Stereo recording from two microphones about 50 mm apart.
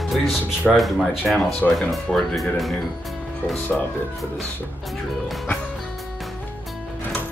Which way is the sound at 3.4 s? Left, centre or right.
Left.